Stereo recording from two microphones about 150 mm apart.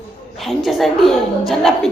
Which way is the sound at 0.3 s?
Centre (ahead or behind).